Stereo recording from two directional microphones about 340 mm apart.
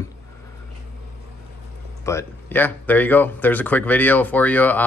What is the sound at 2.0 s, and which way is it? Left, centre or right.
Speech, centre.